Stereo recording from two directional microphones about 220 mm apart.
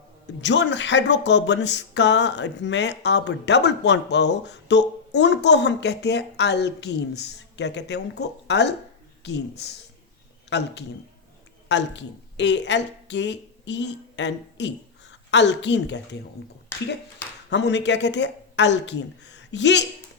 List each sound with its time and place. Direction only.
0.4 s speech: 55° left (ahead or behind)
17.5 s speech: 50° left (ahead or behind)